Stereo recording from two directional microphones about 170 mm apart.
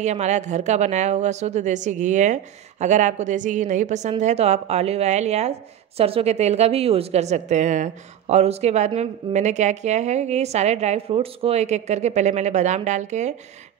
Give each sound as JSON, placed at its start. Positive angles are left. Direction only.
{"t": 0.0, "sound": "speech", "side_deg": -40}